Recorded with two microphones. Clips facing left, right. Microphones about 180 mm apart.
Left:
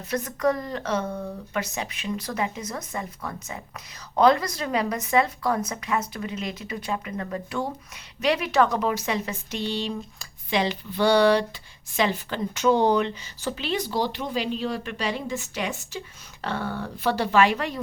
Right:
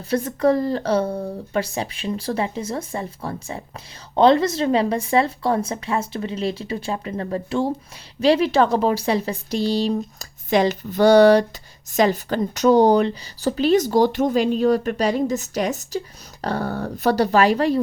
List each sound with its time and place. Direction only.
0.1 s speech: 30° right (ahead or behind)